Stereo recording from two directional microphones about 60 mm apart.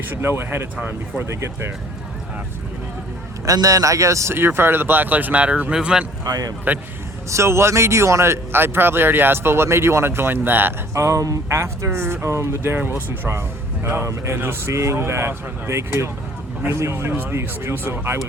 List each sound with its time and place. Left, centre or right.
0.1 s speech: right
3.4 s speech: right
4.4 s speech: right; by 6.1 s centre
6.2 s speech: right
7.3 s speech: right
10.9 s speech: right
11.5 s speech: right
13.8 s speech: right
14.7 s speech: right
17.1 s speech: right
17.3 s speech: right